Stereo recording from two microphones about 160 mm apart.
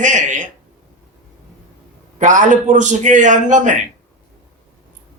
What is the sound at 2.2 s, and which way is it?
Speech, 50° right (ahead or behind).